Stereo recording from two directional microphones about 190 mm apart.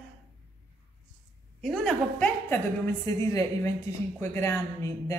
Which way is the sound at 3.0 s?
15° left (ahead or behind).